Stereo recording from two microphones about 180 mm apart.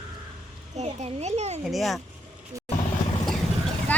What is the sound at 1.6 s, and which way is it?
Speech, centre (ahead or behind).